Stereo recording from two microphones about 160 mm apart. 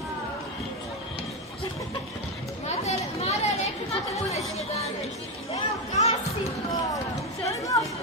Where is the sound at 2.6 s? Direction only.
40° left (ahead or behind).